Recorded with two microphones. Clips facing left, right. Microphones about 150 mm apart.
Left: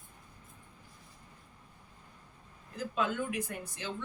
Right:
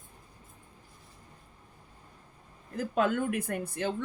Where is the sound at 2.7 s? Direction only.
50° right (ahead or behind).